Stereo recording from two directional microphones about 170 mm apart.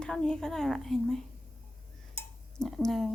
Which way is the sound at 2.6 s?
5° left (ahead or behind).